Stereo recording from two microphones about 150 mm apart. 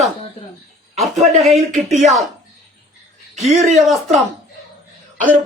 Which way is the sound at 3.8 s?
Centre (ahead or behind).